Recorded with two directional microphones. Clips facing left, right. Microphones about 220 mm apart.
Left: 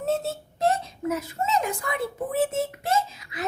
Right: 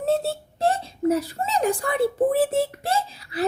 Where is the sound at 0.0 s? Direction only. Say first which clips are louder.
Right 3 dB; 35° right (ahead or behind).